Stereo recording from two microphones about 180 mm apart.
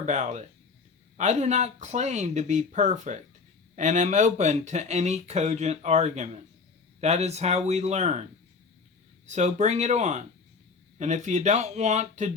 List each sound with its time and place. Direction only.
0.0 s speech: 40° right (ahead or behind)
9.2 s speech: 40° right (ahead or behind)